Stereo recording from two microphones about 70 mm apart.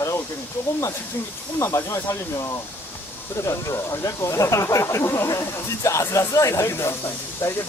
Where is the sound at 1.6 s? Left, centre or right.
Left.